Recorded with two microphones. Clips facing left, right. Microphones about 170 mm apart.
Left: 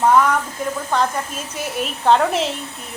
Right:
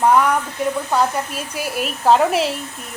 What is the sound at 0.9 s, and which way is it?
A woman's voice, 10° right (ahead or behind).